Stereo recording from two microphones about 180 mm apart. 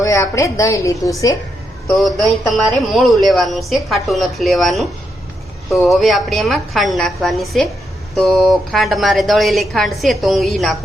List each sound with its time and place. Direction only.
0.0 s a woman's voice: 15° left (ahead or behind)
2.0 s a woman's voice: centre (ahead or behind)